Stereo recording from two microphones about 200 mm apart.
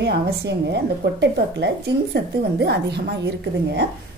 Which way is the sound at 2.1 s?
55° right (ahead or behind).